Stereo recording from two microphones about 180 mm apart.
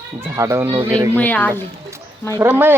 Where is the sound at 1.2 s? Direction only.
10° left (ahead or behind).